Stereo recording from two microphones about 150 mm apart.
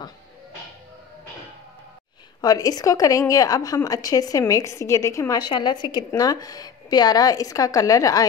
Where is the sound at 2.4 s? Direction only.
25° left (ahead or behind).